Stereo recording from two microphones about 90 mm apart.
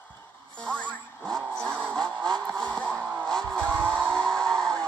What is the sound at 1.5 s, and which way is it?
Vehicle, 10° left (ahead or behind).